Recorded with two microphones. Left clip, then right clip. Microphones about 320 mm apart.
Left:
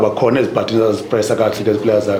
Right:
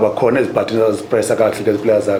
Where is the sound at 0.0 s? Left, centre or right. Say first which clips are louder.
Even; centre.